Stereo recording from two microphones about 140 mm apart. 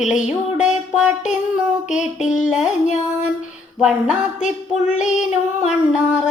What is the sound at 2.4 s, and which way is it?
Music, 5° right (ahead or behind).